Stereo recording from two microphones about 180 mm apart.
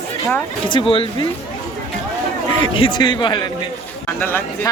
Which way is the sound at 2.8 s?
25° left (ahead or behind).